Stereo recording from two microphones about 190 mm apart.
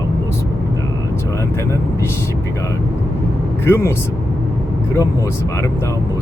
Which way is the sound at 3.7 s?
15° left (ahead or behind).